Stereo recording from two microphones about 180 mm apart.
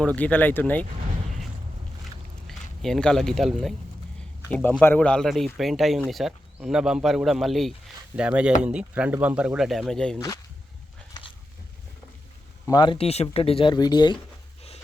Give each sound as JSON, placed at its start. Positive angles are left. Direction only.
{"t": 0.0, "sound": "speech", "side_deg": 5}
{"t": 2.5, "sound": "speech", "side_deg": 0}
{"t": 10.2, "sound": "speech", "side_deg": 20}
{"t": 12.6, "sound": "speech", "side_deg": 25}